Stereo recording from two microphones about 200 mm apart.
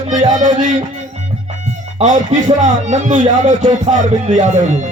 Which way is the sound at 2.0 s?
40° right (ahead or behind).